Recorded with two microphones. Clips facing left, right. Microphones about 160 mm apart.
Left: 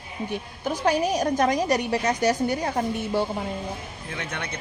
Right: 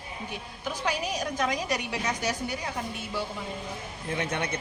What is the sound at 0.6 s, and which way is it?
A woman's voice, 45° left (ahead or behind).